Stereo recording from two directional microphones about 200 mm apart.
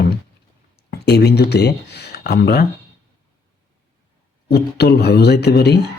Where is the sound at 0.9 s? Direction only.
55° left (ahead or behind).